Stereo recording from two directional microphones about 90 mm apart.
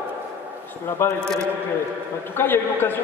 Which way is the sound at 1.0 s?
25° left (ahead or behind).